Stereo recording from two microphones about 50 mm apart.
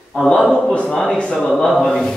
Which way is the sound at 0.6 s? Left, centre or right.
Left.